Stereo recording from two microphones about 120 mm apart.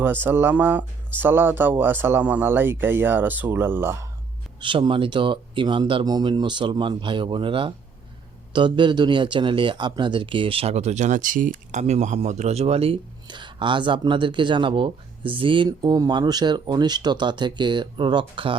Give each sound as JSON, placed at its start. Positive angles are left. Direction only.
{"t": 0.0, "sound": "speech", "side_deg": -15}
{"t": 4.6, "sound": "speech", "side_deg": -45}
{"t": 13.2, "sound": "speech", "side_deg": -40}